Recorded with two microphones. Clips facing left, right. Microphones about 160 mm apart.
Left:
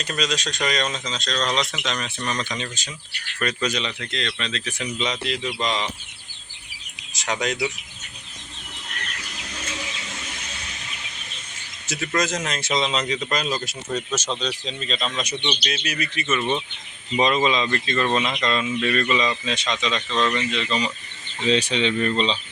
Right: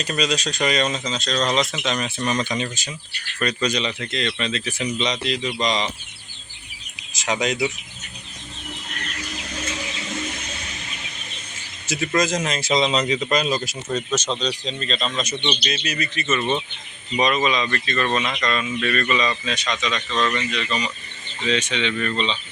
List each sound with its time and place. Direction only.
0.0 s speech: 5° right (ahead or behind)
3.4 s speech: 5° left (ahead or behind)
7.1 s speech: centre (ahead or behind)
11.9 s speech: 5° right (ahead or behind)
13.9 s speech: 5° left (ahead or behind)
15.4 s speech: centre (ahead or behind)
17.2 s speech: 25° left (ahead or behind)